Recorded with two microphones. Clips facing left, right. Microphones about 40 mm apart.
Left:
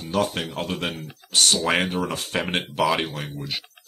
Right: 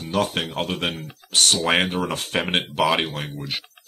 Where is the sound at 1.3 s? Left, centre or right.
Centre.